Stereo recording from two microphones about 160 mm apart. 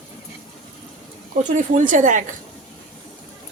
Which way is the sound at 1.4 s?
50° right (ahead or behind).